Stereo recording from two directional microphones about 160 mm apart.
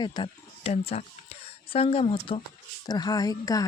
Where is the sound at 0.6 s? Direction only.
40° left (ahead or behind).